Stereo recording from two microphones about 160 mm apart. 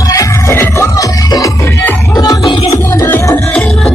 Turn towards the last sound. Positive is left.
turn(degrees=10)  # may be behind; listen again after turning